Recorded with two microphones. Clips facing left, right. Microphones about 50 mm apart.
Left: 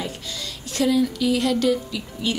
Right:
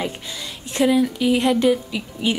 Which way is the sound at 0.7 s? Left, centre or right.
Right.